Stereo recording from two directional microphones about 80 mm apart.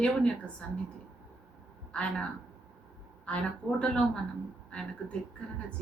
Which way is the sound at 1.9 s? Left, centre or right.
Centre.